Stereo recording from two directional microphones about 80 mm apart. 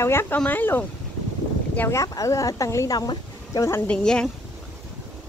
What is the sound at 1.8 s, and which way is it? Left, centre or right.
Speech, left.